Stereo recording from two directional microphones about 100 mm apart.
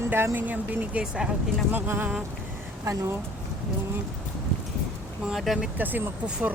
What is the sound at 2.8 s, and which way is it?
Speech, 30° right (ahead or behind).